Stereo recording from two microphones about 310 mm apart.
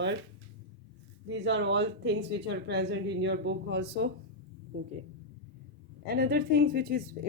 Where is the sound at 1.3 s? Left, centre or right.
Right.